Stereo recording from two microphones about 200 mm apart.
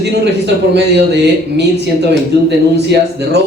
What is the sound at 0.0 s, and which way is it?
A man's voice, 60° right (ahead or behind).